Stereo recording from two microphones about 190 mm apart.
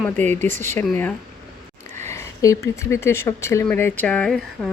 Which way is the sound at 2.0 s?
15° left (ahead or behind).